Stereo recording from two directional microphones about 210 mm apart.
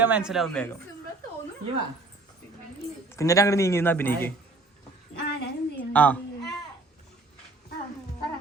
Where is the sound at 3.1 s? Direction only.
15° left (ahead or behind).